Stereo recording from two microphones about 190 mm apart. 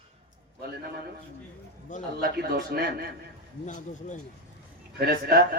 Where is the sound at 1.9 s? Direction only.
40° left (ahead or behind).